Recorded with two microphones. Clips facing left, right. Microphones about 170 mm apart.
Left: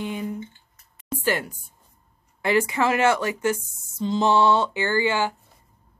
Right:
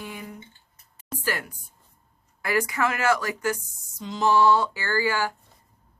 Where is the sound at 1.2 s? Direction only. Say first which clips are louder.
Left 5 dB; 25° left (ahead or behind).